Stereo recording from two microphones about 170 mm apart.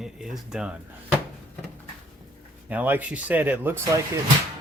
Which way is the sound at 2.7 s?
10° right (ahead or behind).